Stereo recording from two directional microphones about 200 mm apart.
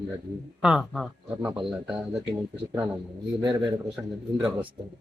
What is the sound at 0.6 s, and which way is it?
Speech, centre (ahead or behind).